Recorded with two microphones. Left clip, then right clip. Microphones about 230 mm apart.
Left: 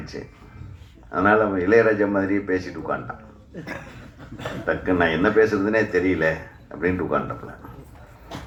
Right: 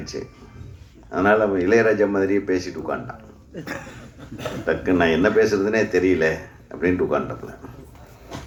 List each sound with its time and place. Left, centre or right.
0.1 s a man's voice: right
4.4 s a man's voice: right